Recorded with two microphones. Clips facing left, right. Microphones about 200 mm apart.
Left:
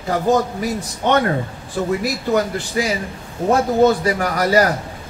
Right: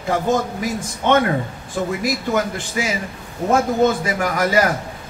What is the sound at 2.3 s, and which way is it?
A man's voice, 35° left (ahead or behind).